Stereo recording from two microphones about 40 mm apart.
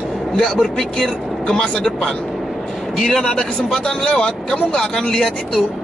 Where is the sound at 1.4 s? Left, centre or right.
Left.